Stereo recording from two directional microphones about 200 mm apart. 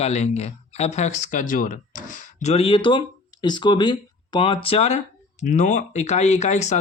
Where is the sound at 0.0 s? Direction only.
30° left (ahead or behind).